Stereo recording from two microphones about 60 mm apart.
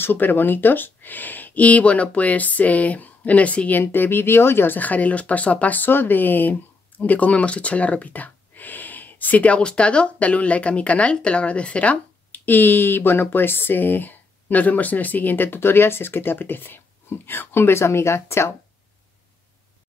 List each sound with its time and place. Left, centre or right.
0.0 s speech: left
3.8 s speech: left
4.7 s speech: left